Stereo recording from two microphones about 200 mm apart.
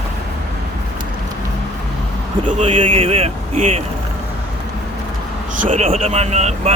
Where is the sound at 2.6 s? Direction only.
25° right (ahead or behind).